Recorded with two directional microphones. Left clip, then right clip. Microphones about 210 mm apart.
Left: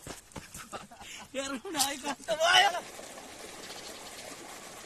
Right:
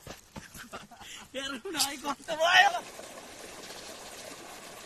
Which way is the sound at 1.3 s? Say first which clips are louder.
Even; 30° left (ahead or behind).